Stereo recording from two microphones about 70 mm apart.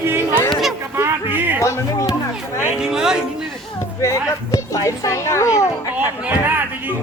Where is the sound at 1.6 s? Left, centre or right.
Left.